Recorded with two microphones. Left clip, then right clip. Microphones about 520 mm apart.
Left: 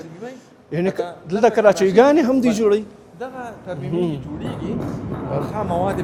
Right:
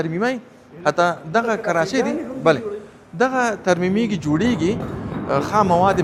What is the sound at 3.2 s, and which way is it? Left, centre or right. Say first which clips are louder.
Speech: right 13 dB; right.